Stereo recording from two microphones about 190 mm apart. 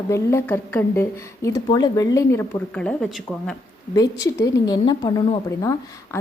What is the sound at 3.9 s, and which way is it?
A woman's voice, 20° left (ahead or behind).